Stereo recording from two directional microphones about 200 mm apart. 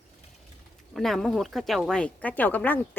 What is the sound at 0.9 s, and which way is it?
Speech, centre (ahead or behind).